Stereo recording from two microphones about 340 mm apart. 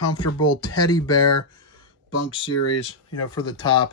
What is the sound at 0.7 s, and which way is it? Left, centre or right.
Speech, centre.